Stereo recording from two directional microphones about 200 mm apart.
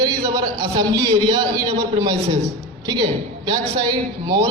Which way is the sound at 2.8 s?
20° right (ahead or behind).